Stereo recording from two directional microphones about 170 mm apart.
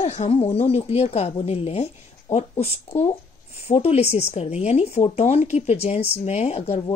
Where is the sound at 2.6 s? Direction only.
35° left (ahead or behind).